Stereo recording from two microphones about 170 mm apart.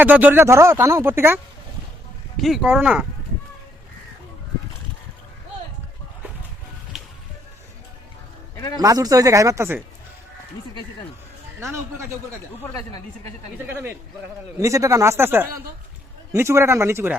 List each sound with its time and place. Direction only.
0.0 s speech: 10° right (ahead or behind)
2.4 s speech: centre (ahead or behind)
6.9 s music: centre (ahead or behind)
8.8 s speech: 20° right (ahead or behind)
11.6 s speech: 15° right (ahead or behind)
13.7 s speech: 15° right (ahead or behind)